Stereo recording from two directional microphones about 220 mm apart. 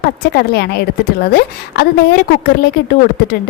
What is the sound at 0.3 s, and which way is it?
A woman's voice, 50° left (ahead or behind).